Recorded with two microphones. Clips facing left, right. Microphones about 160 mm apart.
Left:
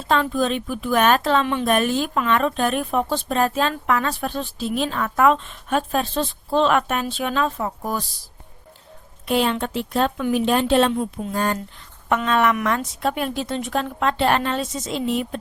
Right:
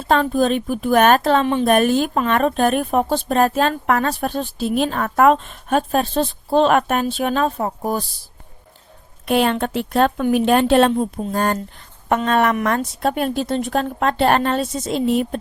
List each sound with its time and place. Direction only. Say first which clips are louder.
0.1 s a woman's voice: right 4 dB; 45° right (ahead or behind)
1.2 s a woman's voice: right 4 dB; 40° right (ahead or behind)
9.2 s a woman's voice: right 3 dB; 55° right (ahead or behind)
10.9 s speech: right 4 dB; 35° right (ahead or behind)
11.3 s a woman's voice: right 3 dB; 50° right (ahead or behind)